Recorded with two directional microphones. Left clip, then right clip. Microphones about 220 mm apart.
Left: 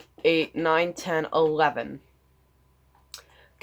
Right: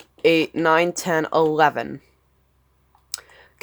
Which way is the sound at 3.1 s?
50° right (ahead or behind).